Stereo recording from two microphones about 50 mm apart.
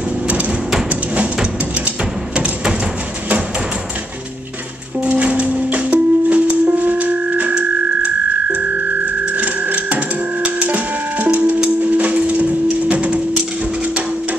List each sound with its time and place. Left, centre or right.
1.1 s music: right
2.3 s a sound: right
5.0 s music: right